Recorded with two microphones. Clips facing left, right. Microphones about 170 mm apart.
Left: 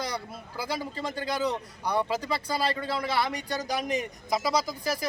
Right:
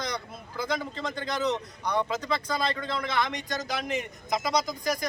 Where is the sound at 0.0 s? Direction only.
10° left (ahead or behind).